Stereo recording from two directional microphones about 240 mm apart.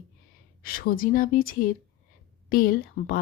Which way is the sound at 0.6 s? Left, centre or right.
Left.